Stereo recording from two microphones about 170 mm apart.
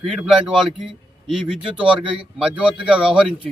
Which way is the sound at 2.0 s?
30° right (ahead or behind).